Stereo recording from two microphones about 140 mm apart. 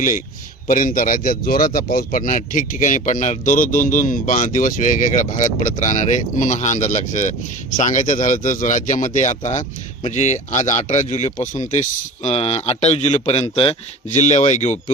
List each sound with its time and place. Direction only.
0.7 s speech: 70° left (ahead or behind)
12.2 s a man's voice: 50° left (ahead or behind)
14.1 s speech: 55° left (ahead or behind)